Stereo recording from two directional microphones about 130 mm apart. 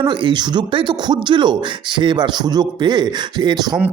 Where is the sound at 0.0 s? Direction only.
40° right (ahead or behind).